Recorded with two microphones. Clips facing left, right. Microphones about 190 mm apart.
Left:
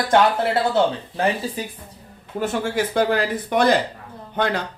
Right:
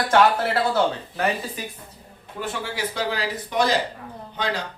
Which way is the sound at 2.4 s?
45° left (ahead or behind).